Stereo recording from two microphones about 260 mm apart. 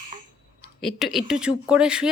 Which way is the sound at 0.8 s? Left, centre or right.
Centre.